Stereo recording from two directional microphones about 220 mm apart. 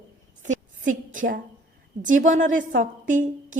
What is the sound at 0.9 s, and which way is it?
A woman's voice, 35° right (ahead or behind).